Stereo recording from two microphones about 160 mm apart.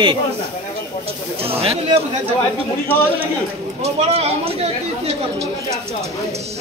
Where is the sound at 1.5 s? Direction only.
40° right (ahead or behind).